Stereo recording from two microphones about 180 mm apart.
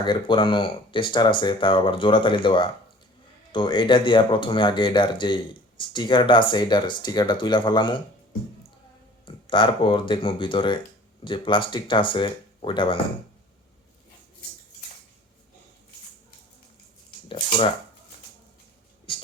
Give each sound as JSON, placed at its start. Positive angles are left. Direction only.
{"t": 0.0, "sound": "speech", "side_deg": 25}
{"t": 9.2, "sound": "speech", "side_deg": 30}